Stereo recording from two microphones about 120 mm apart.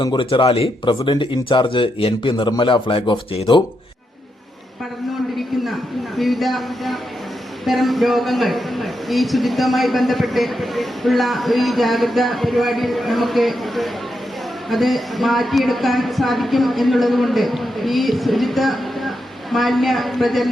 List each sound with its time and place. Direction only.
0.0 s a man's voice: 40° left (ahead or behind)
1.0 s a man's voice: 45° left (ahead or behind)
6.1 s a man's voice: centre (ahead or behind)